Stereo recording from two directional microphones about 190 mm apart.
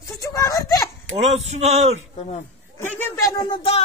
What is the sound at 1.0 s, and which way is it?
Speech, 35° right (ahead or behind).